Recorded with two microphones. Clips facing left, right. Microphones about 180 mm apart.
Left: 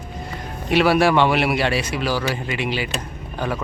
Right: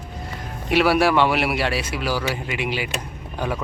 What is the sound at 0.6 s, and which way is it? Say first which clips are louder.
Speech: left 1 dB; 5° right (ahead or behind).